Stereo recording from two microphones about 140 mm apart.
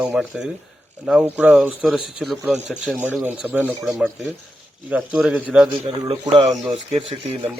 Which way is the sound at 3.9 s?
Centre (ahead or behind).